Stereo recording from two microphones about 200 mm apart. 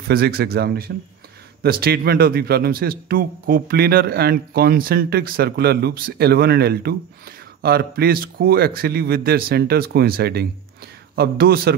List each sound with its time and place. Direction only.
0.1 s a man's voice: 50° right (ahead or behind)